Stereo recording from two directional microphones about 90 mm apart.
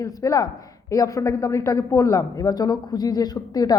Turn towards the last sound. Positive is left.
turn(degrees=45)  # may be behind; listen again after turning